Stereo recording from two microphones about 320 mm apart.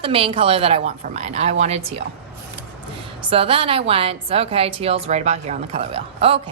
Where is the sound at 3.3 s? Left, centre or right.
Centre.